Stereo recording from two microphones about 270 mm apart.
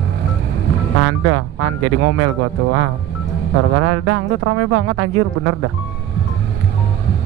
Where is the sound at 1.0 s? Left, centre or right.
Right.